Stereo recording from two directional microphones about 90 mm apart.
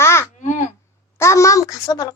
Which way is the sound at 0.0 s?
30° left (ahead or behind).